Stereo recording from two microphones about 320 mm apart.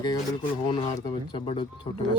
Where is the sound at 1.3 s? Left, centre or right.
Centre.